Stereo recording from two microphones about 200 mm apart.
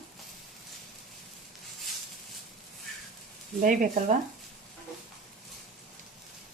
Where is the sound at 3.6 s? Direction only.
40° right (ahead or behind).